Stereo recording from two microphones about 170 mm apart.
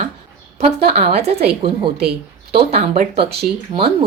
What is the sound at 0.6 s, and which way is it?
A woman's voice, 35° right (ahead or behind).